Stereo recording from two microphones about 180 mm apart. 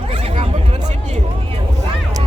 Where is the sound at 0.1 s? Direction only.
30° right (ahead or behind).